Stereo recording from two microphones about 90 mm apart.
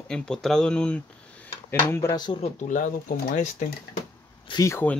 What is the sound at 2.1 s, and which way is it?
Speech, 55° left (ahead or behind).